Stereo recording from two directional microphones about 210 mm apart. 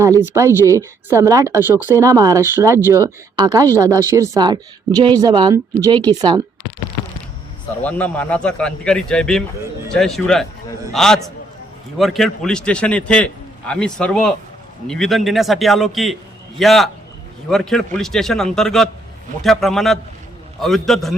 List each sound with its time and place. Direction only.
0.0 s speech: 15° right (ahead or behind)
7.8 s a man's voice: 5° left (ahead or behind)